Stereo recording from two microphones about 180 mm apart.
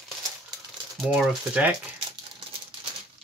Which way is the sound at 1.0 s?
5° right (ahead or behind).